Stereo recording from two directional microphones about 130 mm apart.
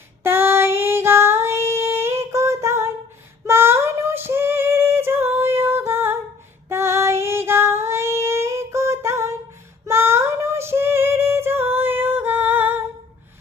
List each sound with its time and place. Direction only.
0.2 s child singing: 20° right (ahead or behind)
3.4 s female singing: 20° right (ahead or behind)
7.9 s child singing: 20° right (ahead or behind)
9.8 s female singing: 20° right (ahead or behind)